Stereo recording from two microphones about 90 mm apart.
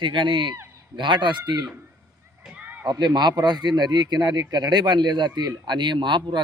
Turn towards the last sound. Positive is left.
turn(degrees=-60)  # may be behind; listen again after turning